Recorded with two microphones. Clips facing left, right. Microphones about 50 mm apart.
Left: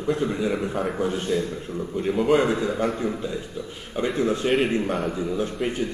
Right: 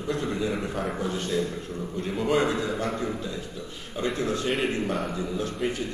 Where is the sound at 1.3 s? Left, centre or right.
Left.